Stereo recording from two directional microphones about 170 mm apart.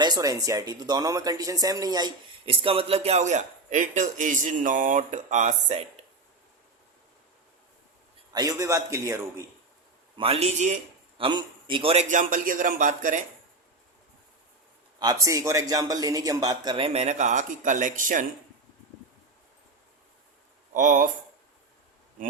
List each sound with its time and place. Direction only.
0.0 s speech: 20° right (ahead or behind); by 5.8 s 45° right (ahead or behind)
8.3 s a man's voice: 20° right (ahead or behind)
10.2 s speech: 35° right (ahead or behind)
11.2 s a man's voice: 30° right (ahead or behind)
12.0 s speech: 50° right (ahead or behind)
14.9 s a man's voice: 20° right (ahead or behind); by 18.3 s 50° right (ahead or behind)
20.7 s speech: 50° right (ahead or behind)